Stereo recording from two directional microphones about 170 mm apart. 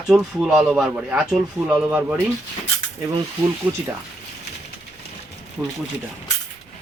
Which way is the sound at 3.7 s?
5° right (ahead or behind).